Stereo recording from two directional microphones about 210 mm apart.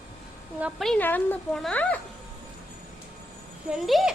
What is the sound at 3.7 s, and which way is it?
Speech, centre (ahead or behind).